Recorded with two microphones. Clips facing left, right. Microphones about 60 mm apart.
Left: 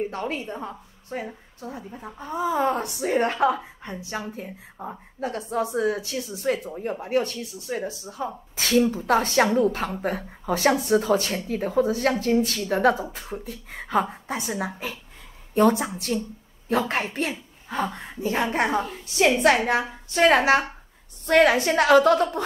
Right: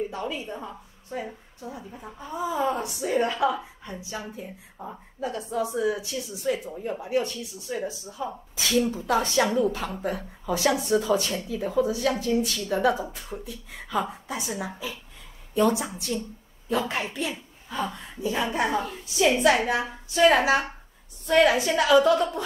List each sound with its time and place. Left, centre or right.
0.0 s a woman's voice: left
1.9 s speech: left
2.1 s a woman's voice: left